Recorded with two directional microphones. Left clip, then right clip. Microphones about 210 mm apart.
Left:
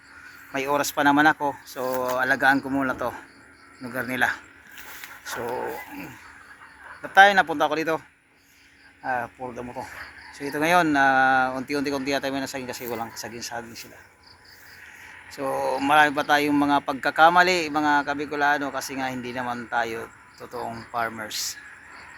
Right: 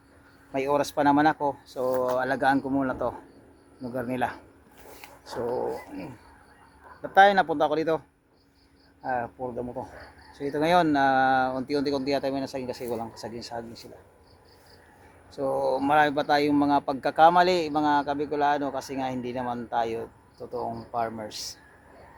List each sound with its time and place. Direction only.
0.5 s speech: centre (ahead or behind)
5.6 s speech: centre (ahead or behind)
9.0 s speech: 5° left (ahead or behind)
15.3 s speech: 5° left (ahead or behind)
20.4 s speech: 25° left (ahead or behind)
21.2 s speech: centre (ahead or behind)